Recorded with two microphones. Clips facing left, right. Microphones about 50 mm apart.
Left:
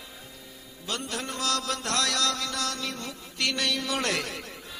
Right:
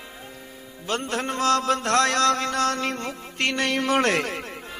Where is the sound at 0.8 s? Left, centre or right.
Right.